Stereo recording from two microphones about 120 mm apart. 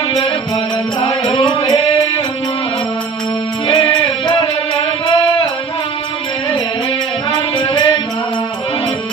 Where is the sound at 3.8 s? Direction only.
50° left (ahead or behind).